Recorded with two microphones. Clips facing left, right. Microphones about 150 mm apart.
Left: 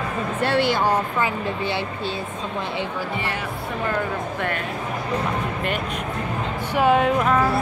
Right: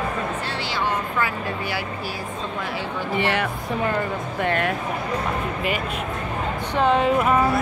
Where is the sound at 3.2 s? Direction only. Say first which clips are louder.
Right 5 dB; 75° right (ahead or behind).